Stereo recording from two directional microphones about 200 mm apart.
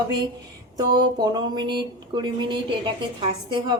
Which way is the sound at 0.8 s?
20° right (ahead or behind).